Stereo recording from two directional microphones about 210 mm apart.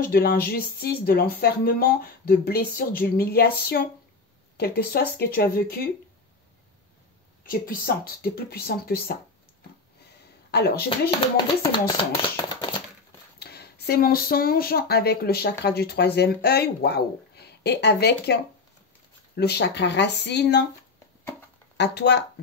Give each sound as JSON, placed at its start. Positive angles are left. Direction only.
{"t": 0.0, "sound": "speech", "side_deg": 45}
{"t": 7.4, "sound": "speech", "side_deg": 45}
{"t": 10.5, "sound": "speech", "side_deg": 50}
{"t": 12.1, "sound": "a sound", "side_deg": 20}
{"t": 13.4, "sound": "speech", "side_deg": 50}
{"t": 21.7, "sound": "speech", "side_deg": 55}